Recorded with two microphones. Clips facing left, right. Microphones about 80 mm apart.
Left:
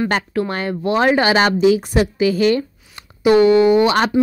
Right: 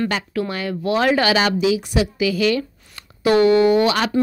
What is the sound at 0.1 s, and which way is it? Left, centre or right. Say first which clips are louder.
A woman's voice: left 4 dB; left.